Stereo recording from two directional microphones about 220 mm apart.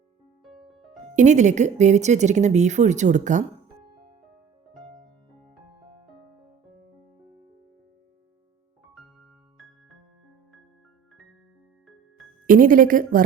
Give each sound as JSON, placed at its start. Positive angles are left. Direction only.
{"t": 0.4, "sound": "music", "side_deg": 0}
{"t": 1.1, "sound": "speech", "side_deg": -35}
{"t": 12.5, "sound": "speech", "side_deg": -40}